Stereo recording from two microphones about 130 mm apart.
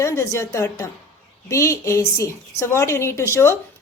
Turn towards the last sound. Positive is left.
turn(degrees=20)  # may be behind; listen again after turning